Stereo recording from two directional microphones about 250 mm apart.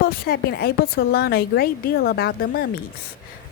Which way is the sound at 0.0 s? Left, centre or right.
Left.